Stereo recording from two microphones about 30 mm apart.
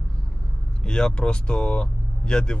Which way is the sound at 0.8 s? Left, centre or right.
Left.